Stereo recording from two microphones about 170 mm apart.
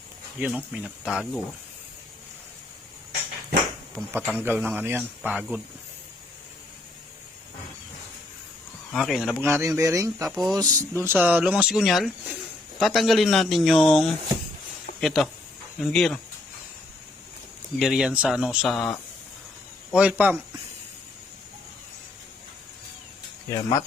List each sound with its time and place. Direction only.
0.3 s speech: 5° right (ahead or behind)
4.4 s speech: 10° right (ahead or behind)
8.9 s speech: centre (ahead or behind)
9.4 s speech: 15° right (ahead or behind); by 16.2 s centre (ahead or behind)
17.7 s speech: 5° right (ahead or behind)
23.5 s speech: 20° left (ahead or behind)